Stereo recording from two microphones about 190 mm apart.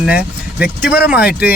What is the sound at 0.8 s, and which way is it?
Speech, 55° left (ahead or behind).